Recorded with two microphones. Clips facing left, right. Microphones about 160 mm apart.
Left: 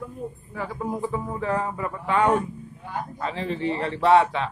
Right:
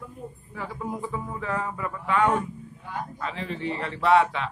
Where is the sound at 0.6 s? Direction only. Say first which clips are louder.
Left 4 dB; 40° left (ahead or behind).